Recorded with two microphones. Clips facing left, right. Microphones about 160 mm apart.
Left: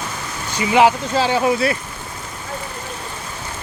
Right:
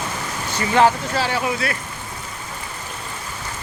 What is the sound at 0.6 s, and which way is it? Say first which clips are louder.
Speech: left 2 dB; 15° left (ahead or behind).